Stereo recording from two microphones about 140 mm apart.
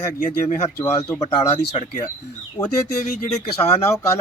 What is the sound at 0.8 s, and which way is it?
Speech, 20° left (ahead or behind).